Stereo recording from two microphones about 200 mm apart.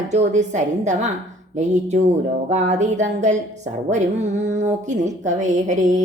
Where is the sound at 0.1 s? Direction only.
35° right (ahead or behind).